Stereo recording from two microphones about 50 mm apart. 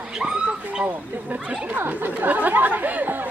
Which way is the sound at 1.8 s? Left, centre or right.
Right.